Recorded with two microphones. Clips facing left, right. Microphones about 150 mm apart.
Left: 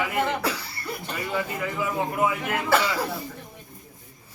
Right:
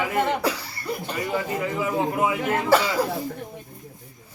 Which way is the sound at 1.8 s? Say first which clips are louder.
Right 1 dB; 25° right (ahead or behind).